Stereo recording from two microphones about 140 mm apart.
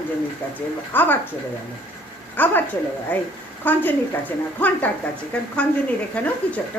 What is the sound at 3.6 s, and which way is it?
A woman's voice, 15° left (ahead or behind).